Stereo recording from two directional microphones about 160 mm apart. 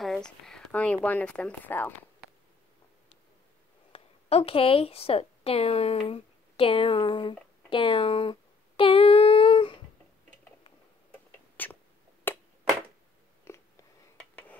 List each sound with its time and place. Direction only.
0.0 s speech: 5° left (ahead or behind)
3.9 s a woman's voice: 40° left (ahead or behind)
11.1 s rodents: 10° left (ahead or behind)
12.3 s a sound: 10° left (ahead or behind)
14.1 s dishes: 10° left (ahead or behind)